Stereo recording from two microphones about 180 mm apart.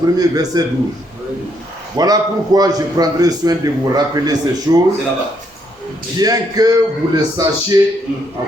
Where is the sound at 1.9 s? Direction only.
20° right (ahead or behind).